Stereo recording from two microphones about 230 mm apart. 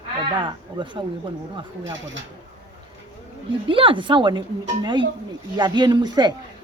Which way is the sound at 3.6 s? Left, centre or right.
Right.